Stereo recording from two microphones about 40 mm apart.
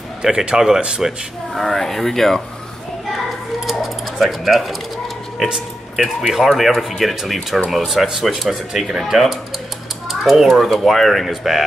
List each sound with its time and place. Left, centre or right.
0.2 s a man's voice: centre
0.7 s speech: right
1.5 s speech: centre
3.6 s a sound: centre
5.9 s speech: centre